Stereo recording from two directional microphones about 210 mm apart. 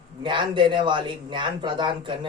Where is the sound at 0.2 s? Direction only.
25° right (ahead or behind).